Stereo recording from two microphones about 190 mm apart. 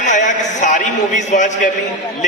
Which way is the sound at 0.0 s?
40° left (ahead or behind).